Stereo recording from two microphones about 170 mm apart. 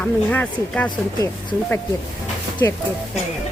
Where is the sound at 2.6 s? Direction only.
15° left (ahead or behind).